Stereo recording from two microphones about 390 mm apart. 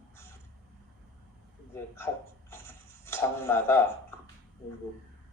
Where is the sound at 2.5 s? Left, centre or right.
Centre.